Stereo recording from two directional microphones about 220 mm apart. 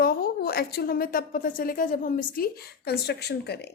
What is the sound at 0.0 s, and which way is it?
A woman's voice, 45° left (ahead or behind).